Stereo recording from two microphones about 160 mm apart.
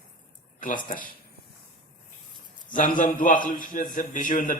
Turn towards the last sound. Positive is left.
turn(degrees=55)  # may be behind; listen again after turning